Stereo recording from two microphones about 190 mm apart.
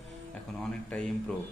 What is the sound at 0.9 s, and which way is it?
Speech, 5° left (ahead or behind).